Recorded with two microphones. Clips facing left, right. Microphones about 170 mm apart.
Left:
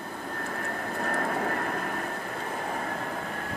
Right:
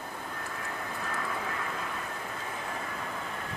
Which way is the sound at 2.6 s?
50° left (ahead or behind).